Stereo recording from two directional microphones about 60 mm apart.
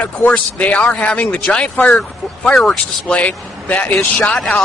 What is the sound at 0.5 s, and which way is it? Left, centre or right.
Speech, left.